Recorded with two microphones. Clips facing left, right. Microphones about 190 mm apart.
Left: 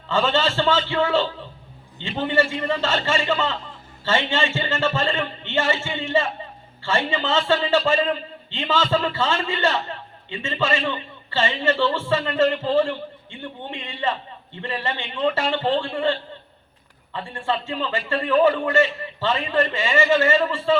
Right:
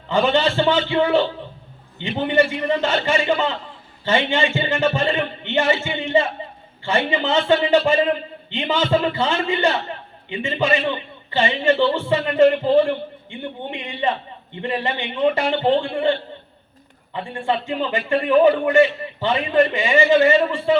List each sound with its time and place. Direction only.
0.1 s a man's voice: 15° right (ahead or behind)